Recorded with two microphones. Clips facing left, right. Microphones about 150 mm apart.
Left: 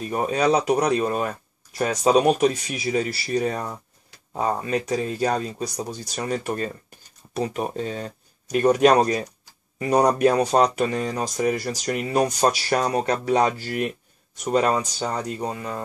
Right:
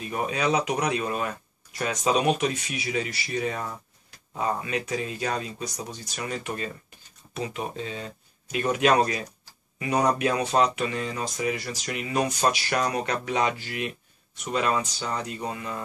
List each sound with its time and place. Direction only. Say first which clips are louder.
0.0 s speech: left 5 dB; 40° left (ahead or behind)